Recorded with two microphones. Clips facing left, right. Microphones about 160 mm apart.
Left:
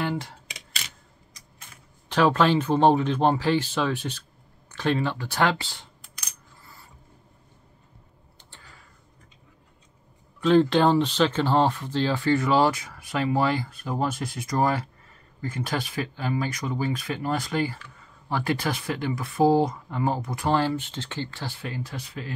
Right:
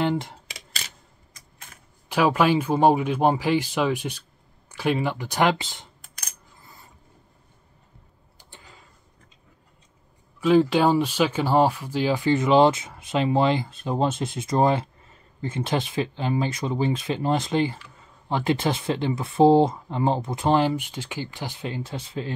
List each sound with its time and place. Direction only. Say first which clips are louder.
0.0 s speech: right 4 dB; 20° right (ahead or behind)
2.0 s speech: even; 10° right (ahead or behind)
8.4 s a sound: right 3 dB; 15° right (ahead or behind)
10.4 s speech: right 1 dB; 10° right (ahead or behind); by 22.3 s 25° right (ahead or behind)